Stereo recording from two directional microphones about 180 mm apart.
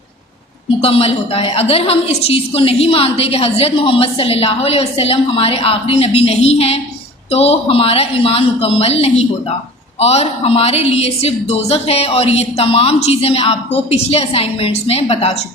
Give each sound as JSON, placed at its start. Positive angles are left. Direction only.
{"t": 0.8, "sound": "a woman's voice", "side_deg": 30}